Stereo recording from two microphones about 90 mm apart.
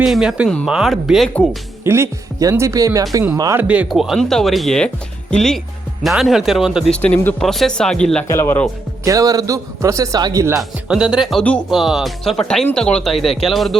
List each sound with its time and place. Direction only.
0.0 s speech: 5° right (ahead or behind)
0.4 s speech: 5° left (ahead or behind)
1.8 s speech: 30° right (ahead or behind)
3.5 s speech: 15° right (ahead or behind)
3.9 s speech: centre (ahead or behind)
6.9 s speech: 15° left (ahead or behind)
7.4 s speech: centre (ahead or behind)
8.3 s speech: 30° left (ahead or behind)
9.0 s speech: 40° right (ahead or behind)
10.8 s speech: 10° right (ahead or behind)